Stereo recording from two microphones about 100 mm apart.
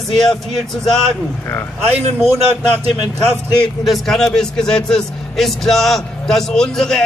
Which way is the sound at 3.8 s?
Centre (ahead or behind).